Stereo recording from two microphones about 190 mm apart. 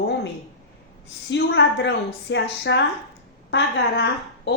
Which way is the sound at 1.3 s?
70° left (ahead or behind).